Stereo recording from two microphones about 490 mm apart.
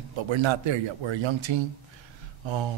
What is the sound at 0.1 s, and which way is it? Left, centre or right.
Speech, right.